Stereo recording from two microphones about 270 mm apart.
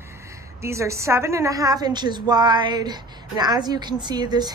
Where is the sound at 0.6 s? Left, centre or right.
Centre.